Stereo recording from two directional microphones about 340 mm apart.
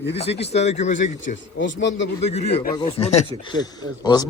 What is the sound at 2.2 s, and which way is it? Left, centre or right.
Speech, centre.